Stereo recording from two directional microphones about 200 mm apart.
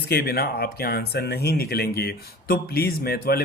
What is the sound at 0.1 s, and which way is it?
Speech, 55° left (ahead or behind).